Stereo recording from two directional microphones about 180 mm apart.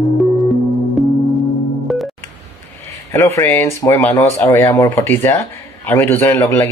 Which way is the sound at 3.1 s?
15° left (ahead or behind).